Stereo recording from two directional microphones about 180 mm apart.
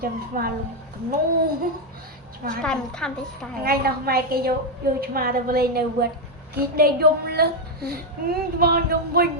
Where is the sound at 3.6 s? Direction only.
55° right (ahead or behind).